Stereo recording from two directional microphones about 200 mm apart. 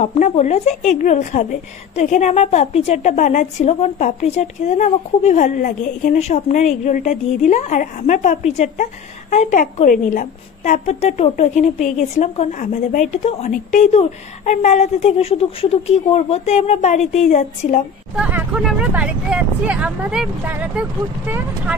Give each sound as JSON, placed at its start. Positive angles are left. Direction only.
{"t": 0.0, "sound": "speech", "side_deg": 35}
{"t": 18.1, "sound": "speech", "side_deg": -5}